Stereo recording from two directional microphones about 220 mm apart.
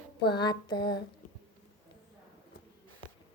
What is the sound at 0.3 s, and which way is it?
Female singing, 20° left (ahead or behind).